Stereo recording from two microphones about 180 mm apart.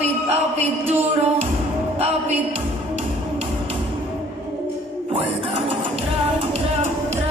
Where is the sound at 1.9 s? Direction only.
35° right (ahead or behind).